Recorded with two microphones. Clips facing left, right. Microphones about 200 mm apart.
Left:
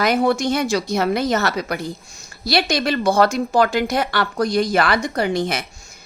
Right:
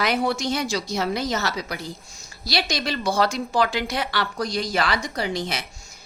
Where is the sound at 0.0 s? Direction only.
50° left (ahead or behind).